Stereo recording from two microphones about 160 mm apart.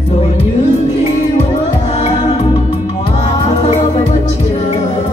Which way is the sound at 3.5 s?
45° left (ahead or behind).